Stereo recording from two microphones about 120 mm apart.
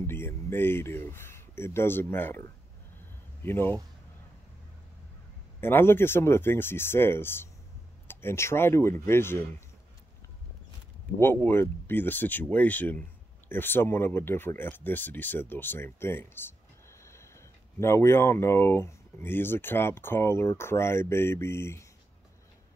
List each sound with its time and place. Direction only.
0.0 s speech: 20° left (ahead or behind)
3.4 s speech: 15° left (ahead or behind)
5.6 s speech: 20° left (ahead or behind)
11.1 s speech: 20° left (ahead or behind)